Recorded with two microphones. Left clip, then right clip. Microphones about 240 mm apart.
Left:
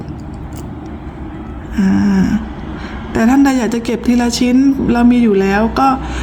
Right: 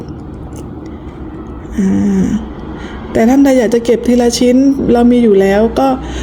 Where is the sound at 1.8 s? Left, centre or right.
Left.